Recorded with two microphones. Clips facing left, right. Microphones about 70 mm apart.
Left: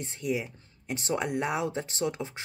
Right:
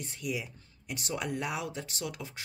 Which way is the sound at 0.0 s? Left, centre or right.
Left.